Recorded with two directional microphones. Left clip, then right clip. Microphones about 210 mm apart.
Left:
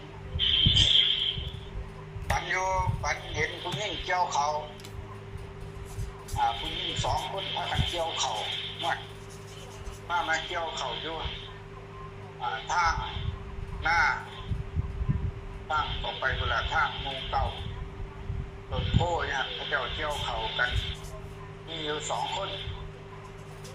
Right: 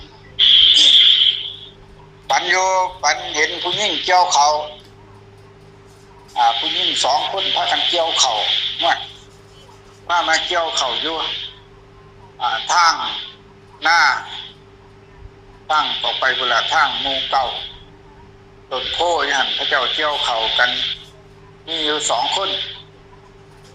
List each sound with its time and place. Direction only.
0.3 s a sound: 55° right (ahead or behind)
2.3 s a man's voice: 55° right (ahead or behind)
6.3 s speech: 55° right (ahead or behind)
10.1 s a man's voice: 55° right (ahead or behind)
15.6 s speech: 55° right (ahead or behind)
18.7 s a man's voice: 55° right (ahead or behind)